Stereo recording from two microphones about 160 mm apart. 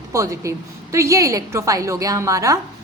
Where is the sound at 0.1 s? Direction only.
20° right (ahead or behind).